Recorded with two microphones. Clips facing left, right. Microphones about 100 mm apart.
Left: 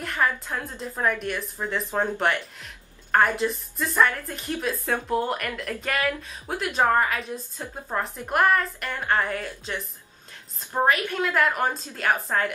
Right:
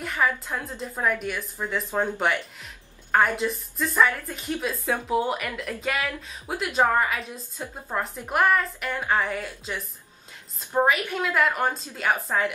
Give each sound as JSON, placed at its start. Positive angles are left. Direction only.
{"t": 0.0, "sound": "a woman's voice", "side_deg": -5}
{"t": 10.8, "sound": "a woman's voice", "side_deg": -5}